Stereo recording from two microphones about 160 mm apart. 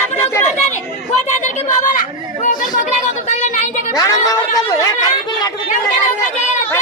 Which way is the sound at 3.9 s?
20° left (ahead or behind).